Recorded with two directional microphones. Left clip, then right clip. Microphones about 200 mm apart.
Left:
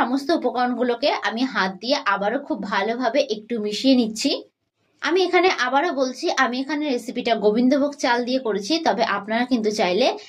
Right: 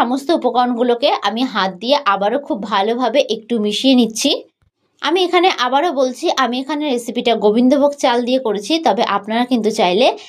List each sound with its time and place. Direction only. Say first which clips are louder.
0.0 s a woman's voice: right 5 dB; 35° right (ahead or behind)